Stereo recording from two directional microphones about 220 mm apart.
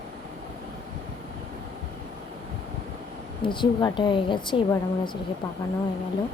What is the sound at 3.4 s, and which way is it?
Speech, 20° left (ahead or behind).